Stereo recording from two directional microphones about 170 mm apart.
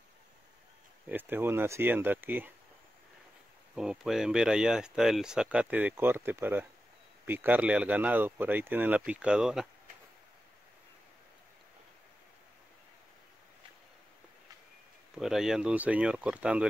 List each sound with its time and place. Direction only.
1.0 s speech: 10° right (ahead or behind)
3.7 s speech: 5° right (ahead or behind)
15.1 s speech: 5° right (ahead or behind)